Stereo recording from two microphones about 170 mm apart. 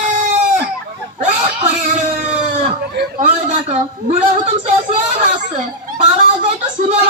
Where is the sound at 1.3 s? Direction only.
35° right (ahead or behind).